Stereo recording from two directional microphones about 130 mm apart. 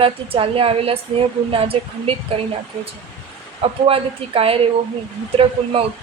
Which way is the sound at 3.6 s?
45° right (ahead or behind).